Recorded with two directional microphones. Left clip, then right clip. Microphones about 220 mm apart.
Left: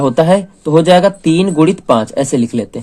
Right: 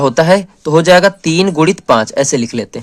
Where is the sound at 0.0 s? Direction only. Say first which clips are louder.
Right 1 dB; 35° right (ahead or behind).